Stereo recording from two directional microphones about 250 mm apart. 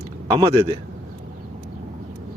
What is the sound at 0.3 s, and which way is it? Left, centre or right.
Speech, centre.